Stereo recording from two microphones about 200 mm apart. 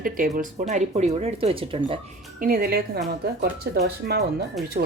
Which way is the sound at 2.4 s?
45° right (ahead or behind).